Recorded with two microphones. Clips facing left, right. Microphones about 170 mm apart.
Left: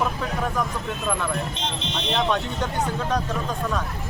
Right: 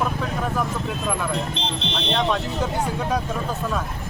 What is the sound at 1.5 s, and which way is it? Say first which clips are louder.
Speech: right 2 dB; 30° right (ahead or behind).